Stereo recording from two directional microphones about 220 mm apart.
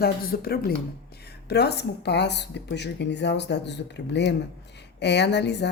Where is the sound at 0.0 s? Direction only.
45° left (ahead or behind).